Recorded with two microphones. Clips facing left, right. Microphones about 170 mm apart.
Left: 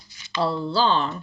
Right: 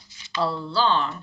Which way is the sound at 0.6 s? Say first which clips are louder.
Even; 35° left (ahead or behind).